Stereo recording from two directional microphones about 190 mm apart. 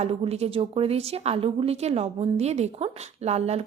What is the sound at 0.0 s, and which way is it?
A woman's voice, 35° right (ahead or behind).